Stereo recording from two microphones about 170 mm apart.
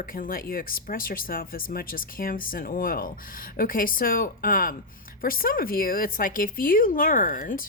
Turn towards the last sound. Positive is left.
turn(degrees=50)  # may be behind; listen again after turning